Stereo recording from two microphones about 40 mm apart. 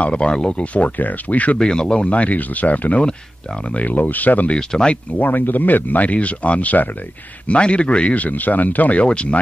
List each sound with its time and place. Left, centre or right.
0.0 s speech: left
0.7 s speech: left
1.6 s speech: centre
2.0 s speech: left
4.5 s speech: left
5.2 s speech: left
7.4 s speech: left
9.0 s speech: left